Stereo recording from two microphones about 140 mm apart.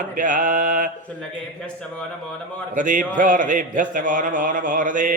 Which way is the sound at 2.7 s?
65° right (ahead or behind).